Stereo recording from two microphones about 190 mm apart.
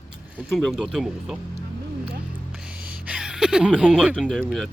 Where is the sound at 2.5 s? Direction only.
5° right (ahead or behind).